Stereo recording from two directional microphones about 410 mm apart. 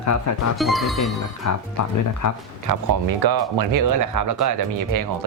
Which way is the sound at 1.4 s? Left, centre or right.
Left.